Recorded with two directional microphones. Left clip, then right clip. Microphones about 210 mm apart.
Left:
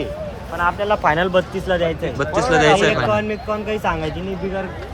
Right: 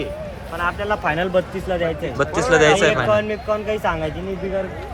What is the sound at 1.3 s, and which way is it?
Speech, centre (ahead or behind).